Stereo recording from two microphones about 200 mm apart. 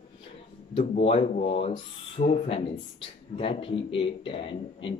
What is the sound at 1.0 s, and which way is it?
Speech, 30° left (ahead or behind).